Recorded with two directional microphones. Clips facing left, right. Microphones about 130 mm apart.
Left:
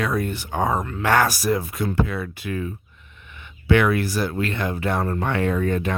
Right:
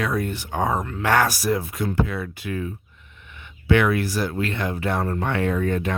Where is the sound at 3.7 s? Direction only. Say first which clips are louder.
Left 1 dB; 50° left (ahead or behind).